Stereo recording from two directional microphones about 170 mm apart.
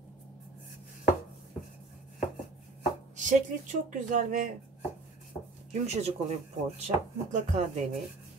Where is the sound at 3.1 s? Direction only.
45° right (ahead or behind).